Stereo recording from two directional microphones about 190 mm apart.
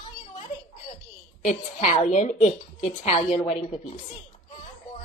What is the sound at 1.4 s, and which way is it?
Speech, 40° left (ahead or behind).